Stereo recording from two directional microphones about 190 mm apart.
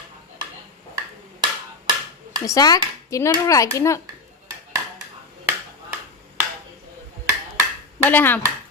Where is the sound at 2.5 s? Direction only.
20° left (ahead or behind).